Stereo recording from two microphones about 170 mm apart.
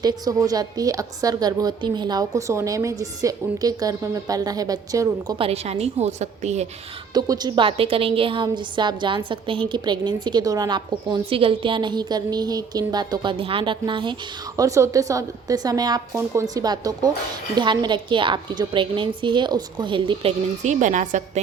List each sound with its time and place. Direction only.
0.0 s a woman's voice: 20° right (ahead or behind)
5.4 s a woman's voice: 35° right (ahead or behind)
7.1 s a woman's voice: 25° right (ahead or behind)
20.7 s a woman's voice: 45° right (ahead or behind)